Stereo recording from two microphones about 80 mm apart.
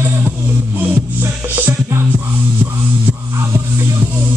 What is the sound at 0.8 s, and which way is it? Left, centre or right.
Music, right.